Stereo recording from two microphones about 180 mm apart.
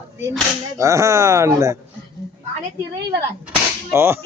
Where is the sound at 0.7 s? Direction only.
15° right (ahead or behind).